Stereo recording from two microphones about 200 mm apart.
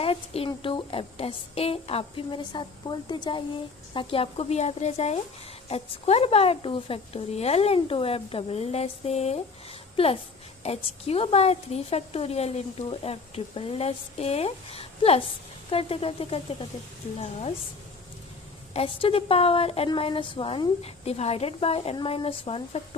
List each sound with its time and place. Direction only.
0.0 s a woman's voice: 30° left (ahead or behind)
10.6 s a woman's voice: 30° left (ahead or behind)
18.7 s speech: 30° left (ahead or behind)